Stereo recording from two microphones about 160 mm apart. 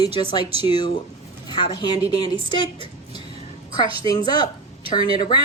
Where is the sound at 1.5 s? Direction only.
30° left (ahead or behind).